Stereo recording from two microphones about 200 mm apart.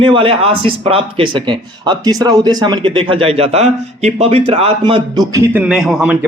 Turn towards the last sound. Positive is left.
turn(degrees=-5)  # may be behind; listen again after turning